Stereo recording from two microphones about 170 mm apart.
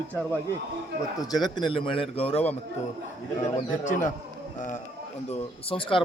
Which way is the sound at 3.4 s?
45° left (ahead or behind).